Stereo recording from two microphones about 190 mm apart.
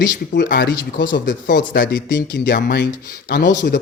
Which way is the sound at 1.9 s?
70° left (ahead or behind).